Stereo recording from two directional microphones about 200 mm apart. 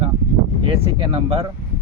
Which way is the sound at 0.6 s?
25° right (ahead or behind).